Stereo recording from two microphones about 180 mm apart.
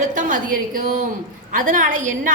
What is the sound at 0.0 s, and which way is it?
A woman's voice, 45° right (ahead or behind).